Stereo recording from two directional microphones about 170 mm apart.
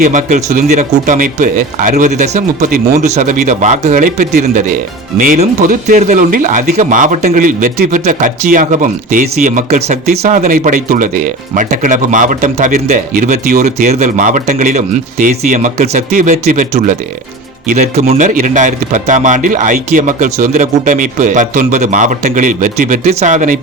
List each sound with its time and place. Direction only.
0.0 s speech: 45° right (ahead or behind)